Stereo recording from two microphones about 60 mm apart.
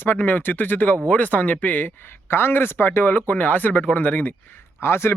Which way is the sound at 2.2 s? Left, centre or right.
Left.